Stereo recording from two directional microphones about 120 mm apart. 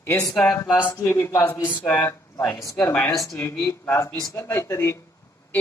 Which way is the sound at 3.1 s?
30° left (ahead or behind).